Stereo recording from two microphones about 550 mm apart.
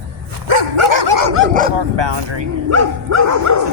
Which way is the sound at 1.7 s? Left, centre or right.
Right.